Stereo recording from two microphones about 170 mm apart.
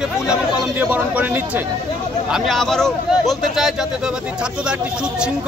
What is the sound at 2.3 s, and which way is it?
Speech, centre (ahead or behind).